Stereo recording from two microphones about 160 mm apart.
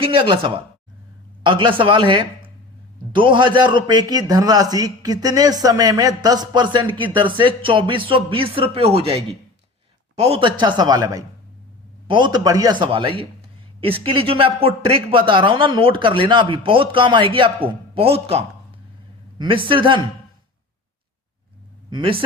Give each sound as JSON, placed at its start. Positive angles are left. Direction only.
{"t": 0.0, "sound": "a man's voice", "side_deg": -30}
{"t": 21.8, "sound": "a man's voice", "side_deg": -30}